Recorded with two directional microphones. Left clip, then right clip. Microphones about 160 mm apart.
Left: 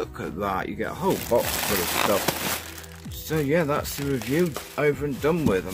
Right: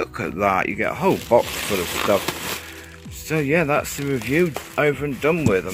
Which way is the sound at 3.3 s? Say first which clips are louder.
Right 4 dB; 20° right (ahead or behind).